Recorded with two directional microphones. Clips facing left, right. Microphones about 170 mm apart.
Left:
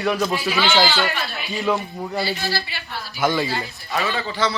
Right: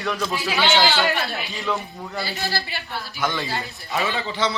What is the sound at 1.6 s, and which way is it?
Speech, 20° left (ahead or behind).